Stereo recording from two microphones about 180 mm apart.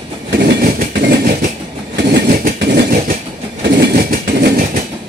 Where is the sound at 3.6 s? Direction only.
55° right (ahead or behind).